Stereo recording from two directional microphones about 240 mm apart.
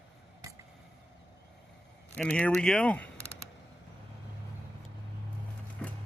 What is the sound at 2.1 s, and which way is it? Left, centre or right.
Speech, centre.